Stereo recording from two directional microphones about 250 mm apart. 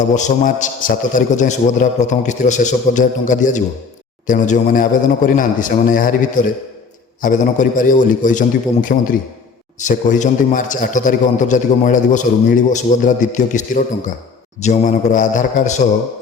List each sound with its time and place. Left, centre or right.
0.1 s a man's voice: left